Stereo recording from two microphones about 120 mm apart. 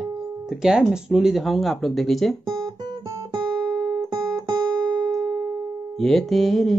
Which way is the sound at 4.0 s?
30° right (ahead or behind).